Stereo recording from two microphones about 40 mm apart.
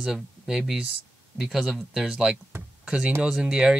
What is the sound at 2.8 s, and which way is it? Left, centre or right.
Speech, right.